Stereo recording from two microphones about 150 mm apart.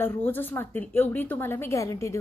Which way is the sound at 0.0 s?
15° left (ahead or behind).